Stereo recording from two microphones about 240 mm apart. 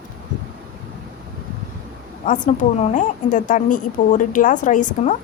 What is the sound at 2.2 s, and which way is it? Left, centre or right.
A woman's voice, left.